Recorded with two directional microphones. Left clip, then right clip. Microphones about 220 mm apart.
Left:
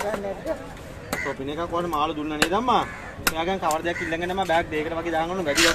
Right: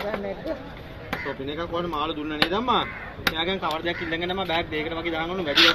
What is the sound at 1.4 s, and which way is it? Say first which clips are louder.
Speech: left 2 dB; 10° left (ahead or behind).